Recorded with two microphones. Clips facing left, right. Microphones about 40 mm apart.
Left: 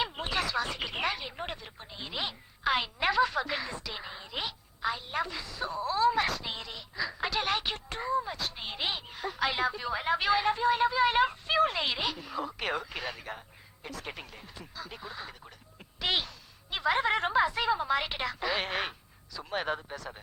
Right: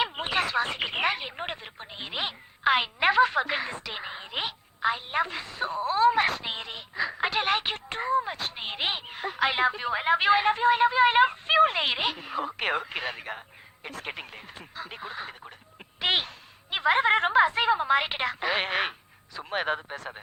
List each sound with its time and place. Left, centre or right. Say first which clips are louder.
0.0 s speech: right 4 dB; right